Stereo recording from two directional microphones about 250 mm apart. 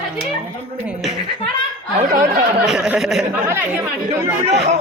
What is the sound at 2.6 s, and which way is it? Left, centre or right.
Speech, centre.